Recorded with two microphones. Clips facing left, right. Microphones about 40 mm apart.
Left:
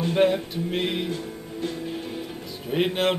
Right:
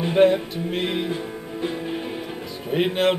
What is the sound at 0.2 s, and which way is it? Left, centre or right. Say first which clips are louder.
Speech: right 5 dB; centre.